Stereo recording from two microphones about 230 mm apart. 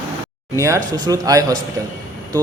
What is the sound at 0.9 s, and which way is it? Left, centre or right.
Speech, centre.